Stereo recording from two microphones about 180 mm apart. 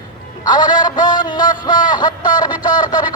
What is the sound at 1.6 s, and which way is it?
A man's voice, 25° left (ahead or behind).